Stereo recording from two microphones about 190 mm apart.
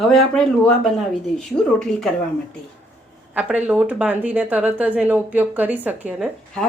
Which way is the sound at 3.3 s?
5° right (ahead or behind).